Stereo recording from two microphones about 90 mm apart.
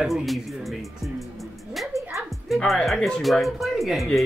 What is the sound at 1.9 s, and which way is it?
Music, 35° left (ahead or behind).